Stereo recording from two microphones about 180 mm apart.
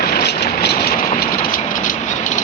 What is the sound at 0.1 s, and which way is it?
Vehicle, 65° left (ahead or behind).